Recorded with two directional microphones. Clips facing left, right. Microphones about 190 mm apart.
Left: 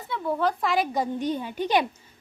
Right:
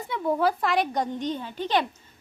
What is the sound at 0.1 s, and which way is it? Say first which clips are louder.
Speech: right 2 dB; 15° right (ahead or behind).